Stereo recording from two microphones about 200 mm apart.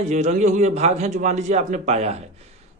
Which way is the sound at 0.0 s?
35° right (ahead or behind).